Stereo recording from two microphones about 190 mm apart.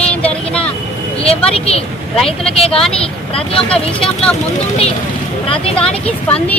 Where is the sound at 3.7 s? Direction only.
5° left (ahead or behind).